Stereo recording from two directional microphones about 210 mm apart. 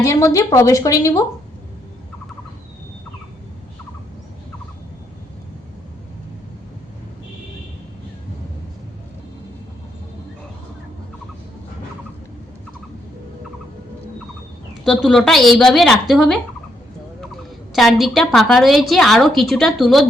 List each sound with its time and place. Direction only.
0.0 s speech: 15° left (ahead or behind)
14.8 s a woman's voice: centre (ahead or behind)
17.7 s a woman's voice: centre (ahead or behind)